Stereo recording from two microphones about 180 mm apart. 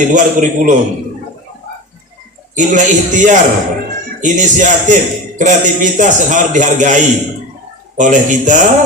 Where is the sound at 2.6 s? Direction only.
45° right (ahead or behind).